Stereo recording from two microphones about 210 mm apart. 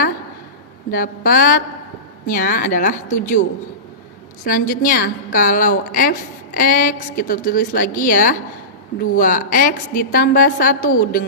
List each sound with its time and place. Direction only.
0.9 s a woman's voice: 40° left (ahead or behind)
4.4 s a woman's voice: 40° left (ahead or behind)